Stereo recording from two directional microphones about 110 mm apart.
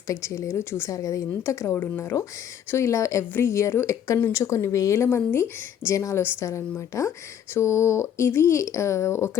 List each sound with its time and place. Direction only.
0.1 s speech: 25° left (ahead or behind)